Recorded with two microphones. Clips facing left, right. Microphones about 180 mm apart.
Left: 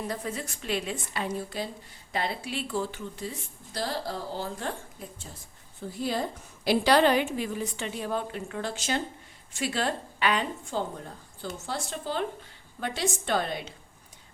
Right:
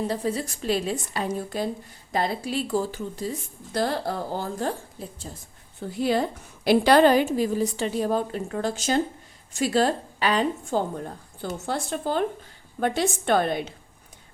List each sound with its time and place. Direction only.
0.1 s a woman's voice: 30° right (ahead or behind)
3.7 s a woman's voice: 55° right (ahead or behind); by 5.3 s 40° right (ahead or behind)
6.0 s speech: 70° right (ahead or behind)
6.7 s a woman's voice: 50° right (ahead or behind)
11.6 s a woman's voice: 55° right (ahead or behind)